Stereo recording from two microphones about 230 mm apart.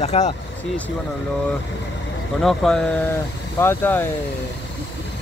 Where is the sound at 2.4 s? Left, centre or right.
Centre.